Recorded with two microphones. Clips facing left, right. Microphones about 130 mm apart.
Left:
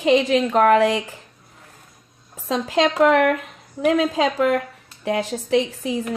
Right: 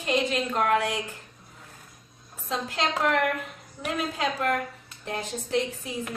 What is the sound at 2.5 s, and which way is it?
Speech, 90° left.